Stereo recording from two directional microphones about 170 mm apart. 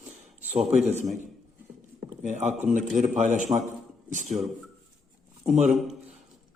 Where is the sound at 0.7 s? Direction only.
40° right (ahead or behind).